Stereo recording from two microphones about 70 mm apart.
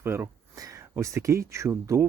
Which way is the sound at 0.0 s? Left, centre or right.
Right.